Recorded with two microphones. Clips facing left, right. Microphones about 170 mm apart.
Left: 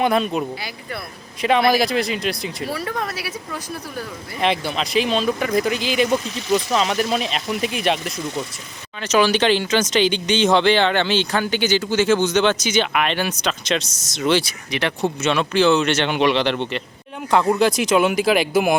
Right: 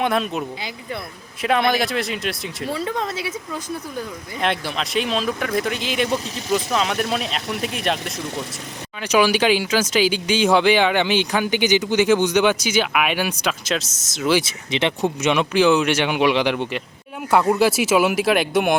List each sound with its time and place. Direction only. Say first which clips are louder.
0.0 s speech: left 2 dB; centre (ahead or behind)
2.6 s speech: right 2 dB; 20° right (ahead or behind)
4.4 s speech: left 2 dB; centre (ahead or behind)
9.0 s speech: even; 10° right (ahead or behind)
14.4 s speech: right 2 dB; 25° right (ahead or behind); by 18.8 s centre (ahead or behind)